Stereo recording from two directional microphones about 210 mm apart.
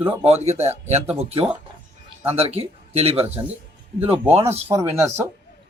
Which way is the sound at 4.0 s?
10° right (ahead or behind).